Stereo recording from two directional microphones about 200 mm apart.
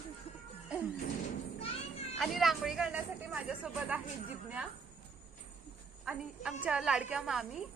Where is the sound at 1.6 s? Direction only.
30° left (ahead or behind).